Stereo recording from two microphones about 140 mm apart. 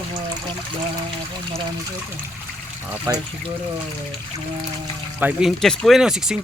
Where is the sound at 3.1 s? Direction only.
20° right (ahead or behind).